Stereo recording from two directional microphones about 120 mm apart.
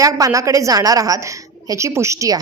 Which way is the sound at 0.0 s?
30° right (ahead or behind).